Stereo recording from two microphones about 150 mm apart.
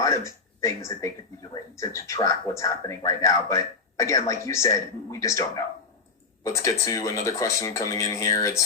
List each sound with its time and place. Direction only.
0.0 s a man's voice: 20° left (ahead or behind)